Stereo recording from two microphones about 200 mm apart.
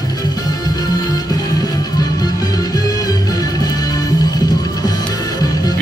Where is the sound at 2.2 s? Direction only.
20° left (ahead or behind).